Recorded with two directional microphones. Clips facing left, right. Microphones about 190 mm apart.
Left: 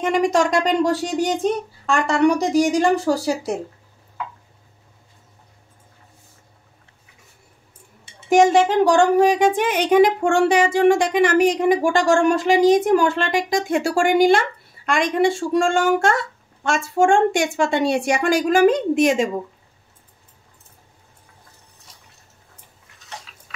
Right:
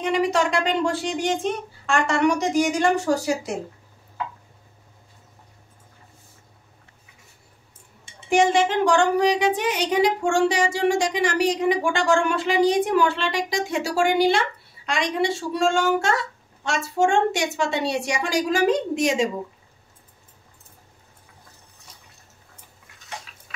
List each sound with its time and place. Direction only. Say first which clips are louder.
0.0 s speech: left 3 dB; 45° left (ahead or behind)
8.3 s speech: left 4 dB; 40° left (ahead or behind)